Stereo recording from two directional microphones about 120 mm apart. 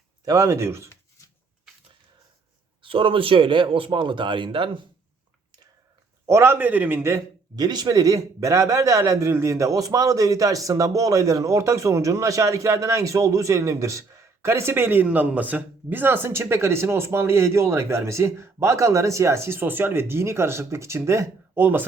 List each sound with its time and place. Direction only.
0.3 s a man's voice: 25° right (ahead or behind)
2.8 s a man's voice: 45° right (ahead or behind)
6.2 s a man's voice: 20° right (ahead or behind)
7.5 s a man's voice: 35° right (ahead or behind); by 21.8 s 15° right (ahead or behind)